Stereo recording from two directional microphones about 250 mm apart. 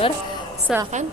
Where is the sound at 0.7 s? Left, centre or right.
Centre.